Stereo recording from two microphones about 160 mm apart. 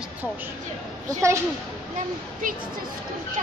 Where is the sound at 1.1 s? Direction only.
20° right (ahead or behind).